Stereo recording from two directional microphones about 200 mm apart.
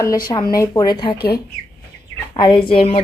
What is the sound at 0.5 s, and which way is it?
Speech, 20° left (ahead or behind).